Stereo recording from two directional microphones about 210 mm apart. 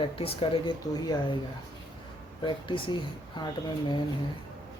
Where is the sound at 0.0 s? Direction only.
25° left (ahead or behind).